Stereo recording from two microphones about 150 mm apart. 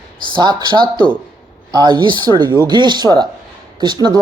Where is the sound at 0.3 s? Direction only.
30° right (ahead or behind).